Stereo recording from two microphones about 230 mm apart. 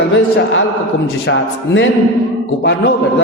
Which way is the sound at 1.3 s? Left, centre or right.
Left.